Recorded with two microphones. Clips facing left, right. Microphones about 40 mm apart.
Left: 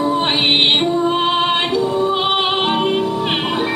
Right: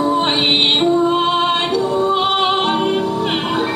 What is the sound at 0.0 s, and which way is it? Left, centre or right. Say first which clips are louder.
Music: right 1 dB; centre.